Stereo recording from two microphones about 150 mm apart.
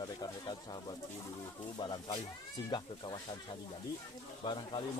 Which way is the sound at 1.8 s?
30° left (ahead or behind).